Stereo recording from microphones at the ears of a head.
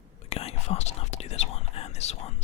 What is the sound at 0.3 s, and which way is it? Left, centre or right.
Whispering, left.